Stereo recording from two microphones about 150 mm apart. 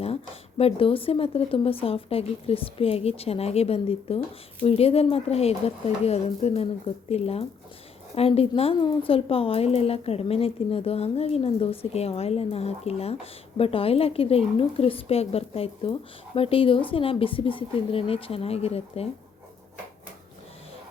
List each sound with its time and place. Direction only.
0.6 s a woman's voice: 40° left (ahead or behind)